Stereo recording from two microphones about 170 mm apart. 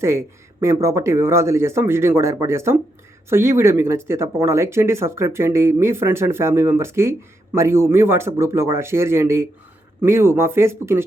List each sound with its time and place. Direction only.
0.0 s speech: 15° right (ahead or behind)